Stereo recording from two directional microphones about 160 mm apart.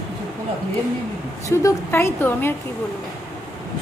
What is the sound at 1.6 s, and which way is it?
Speech, 15° left (ahead or behind).